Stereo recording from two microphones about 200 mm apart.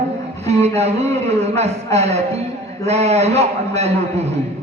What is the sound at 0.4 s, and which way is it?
A man's voice, 30° right (ahead or behind).